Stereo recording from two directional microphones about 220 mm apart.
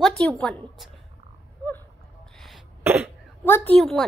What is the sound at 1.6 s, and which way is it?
Cough, 5° left (ahead or behind).